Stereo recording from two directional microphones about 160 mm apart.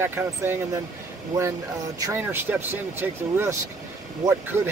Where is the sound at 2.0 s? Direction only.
15° right (ahead or behind).